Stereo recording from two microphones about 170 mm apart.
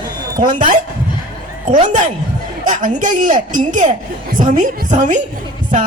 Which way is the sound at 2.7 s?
50° right (ahead or behind).